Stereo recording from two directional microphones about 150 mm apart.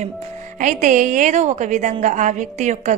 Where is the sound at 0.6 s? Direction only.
55° right (ahead or behind).